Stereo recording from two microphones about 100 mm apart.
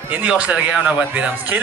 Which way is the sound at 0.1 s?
15° right (ahead or behind).